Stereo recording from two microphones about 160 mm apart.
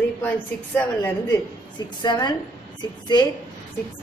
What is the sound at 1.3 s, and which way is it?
A woman's voice, 25° left (ahead or behind).